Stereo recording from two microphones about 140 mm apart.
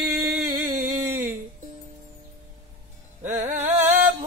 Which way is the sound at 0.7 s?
85° right.